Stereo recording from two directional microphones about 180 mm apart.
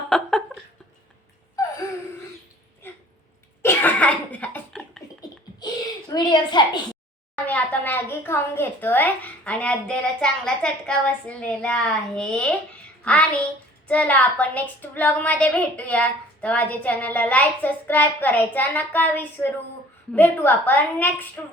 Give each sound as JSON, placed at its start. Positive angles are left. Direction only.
{"t": 0.1, "sound": "a sound", "side_deg": 0}
{"t": 2.8, "sound": "dog", "side_deg": 10}
{"t": 3.6, "sound": "cough", "side_deg": 10}
{"t": 6.1, "sound": "a woman's voice", "side_deg": 25}
{"t": 7.3, "sound": "a woman's voice", "side_deg": 10}